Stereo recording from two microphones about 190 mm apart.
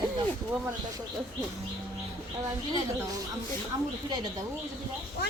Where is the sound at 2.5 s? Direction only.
20° right (ahead or behind).